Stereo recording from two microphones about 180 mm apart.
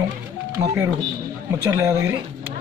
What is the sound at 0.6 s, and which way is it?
Speech, 15° right (ahead or behind).